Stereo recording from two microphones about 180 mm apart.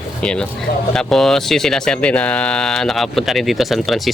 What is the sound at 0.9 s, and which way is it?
Speech, centre (ahead or behind).